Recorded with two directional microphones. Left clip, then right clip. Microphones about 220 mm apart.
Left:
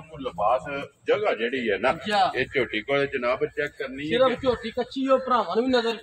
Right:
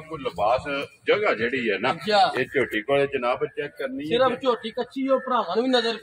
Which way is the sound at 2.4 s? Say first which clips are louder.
Right 1 dB; 20° right (ahead or behind).